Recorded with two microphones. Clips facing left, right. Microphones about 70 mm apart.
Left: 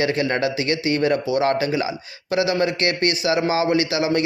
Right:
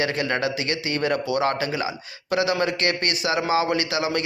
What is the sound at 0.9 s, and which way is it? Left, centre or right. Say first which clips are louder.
Speech: left 2 dB; right.